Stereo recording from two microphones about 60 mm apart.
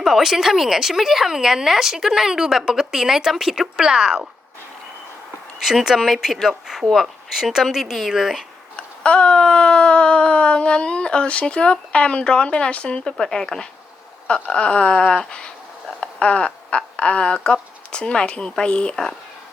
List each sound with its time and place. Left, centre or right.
0.0 s speech: centre
5.6 s speech: centre
8.7 s a sound: centre
16.0 s speech: centre